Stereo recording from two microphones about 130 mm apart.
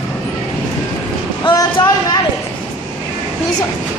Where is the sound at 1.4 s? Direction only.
40° left (ahead or behind).